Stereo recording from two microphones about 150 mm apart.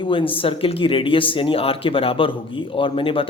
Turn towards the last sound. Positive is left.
turn(degrees=35)  # may be behind; listen again after turning